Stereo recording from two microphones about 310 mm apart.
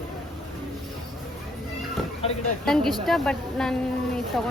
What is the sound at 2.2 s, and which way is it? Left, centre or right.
Speech, centre.